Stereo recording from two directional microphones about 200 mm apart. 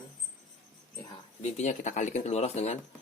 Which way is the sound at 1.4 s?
35° left (ahead or behind).